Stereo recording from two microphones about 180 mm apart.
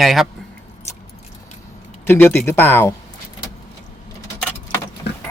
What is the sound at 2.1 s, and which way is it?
Speech, 10° left (ahead or behind).